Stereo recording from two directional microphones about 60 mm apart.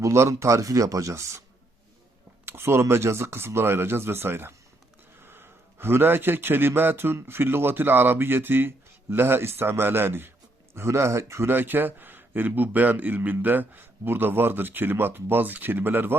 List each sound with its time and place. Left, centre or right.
0.0 s a man's voice: right
2.5 s a man's voice: right
10.8 s speech: right
11.5 s a man's voice: right